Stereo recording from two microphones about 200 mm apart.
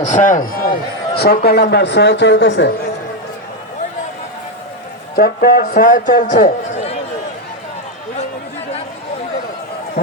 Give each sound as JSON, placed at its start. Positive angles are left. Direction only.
{"t": 0.0, "sound": "a man's voice", "side_deg": 40}
{"t": 5.1, "sound": "a man's voice", "side_deg": 50}